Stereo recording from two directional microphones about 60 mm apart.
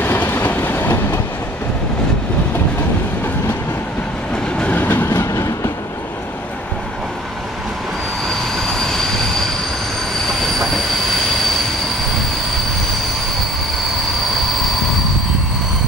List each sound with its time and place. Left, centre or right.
0.0 s train: left
4.7 s train: left
8.3 s train: centre